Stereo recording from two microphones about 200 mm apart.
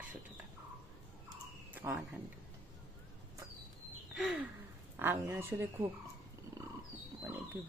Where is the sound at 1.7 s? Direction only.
10° right (ahead or behind).